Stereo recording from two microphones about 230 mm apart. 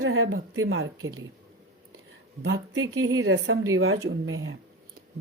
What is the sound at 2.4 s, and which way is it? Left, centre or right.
Speech, right.